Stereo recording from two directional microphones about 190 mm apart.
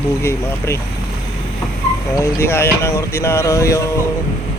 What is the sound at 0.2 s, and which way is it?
Speech, 15° left (ahead or behind).